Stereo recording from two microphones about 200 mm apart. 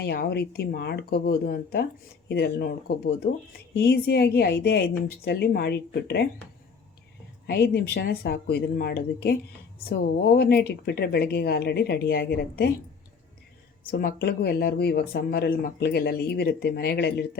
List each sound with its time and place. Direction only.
0.0 s speech: 55° left (ahead or behind)
7.4 s speech: 50° left (ahead or behind)
13.8 s speech: 50° left (ahead or behind)